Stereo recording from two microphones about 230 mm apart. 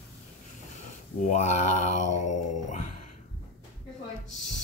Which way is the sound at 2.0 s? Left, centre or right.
Left.